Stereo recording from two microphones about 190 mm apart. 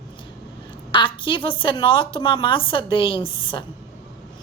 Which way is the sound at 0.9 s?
25° left (ahead or behind).